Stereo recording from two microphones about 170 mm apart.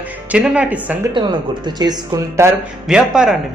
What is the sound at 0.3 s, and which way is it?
Speech, 5° right (ahead or behind).